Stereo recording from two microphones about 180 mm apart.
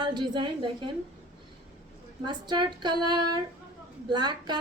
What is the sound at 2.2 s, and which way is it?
A woman's voice, 25° right (ahead or behind).